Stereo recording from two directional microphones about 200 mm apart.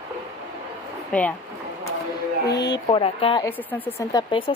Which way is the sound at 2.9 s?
25° left (ahead or behind).